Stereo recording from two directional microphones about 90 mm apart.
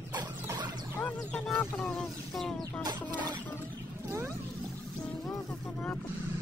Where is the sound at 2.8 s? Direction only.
50° right (ahead or behind).